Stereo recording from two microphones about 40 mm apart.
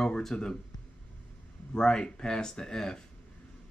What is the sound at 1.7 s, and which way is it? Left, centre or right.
Speech, centre.